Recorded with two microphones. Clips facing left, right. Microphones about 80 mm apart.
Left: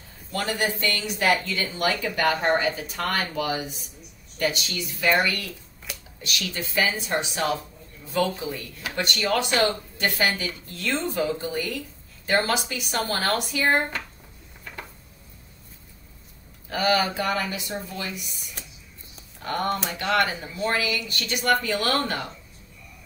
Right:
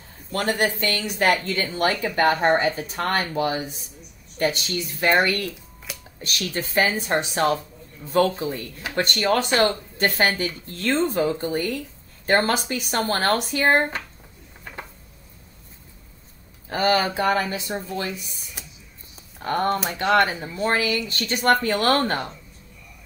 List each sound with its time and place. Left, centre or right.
0.3 s speech: right
5.9 s a sound: centre
6.2 s speech: right
16.6 s speech: right